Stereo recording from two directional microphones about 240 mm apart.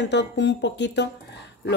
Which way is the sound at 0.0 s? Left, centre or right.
Left.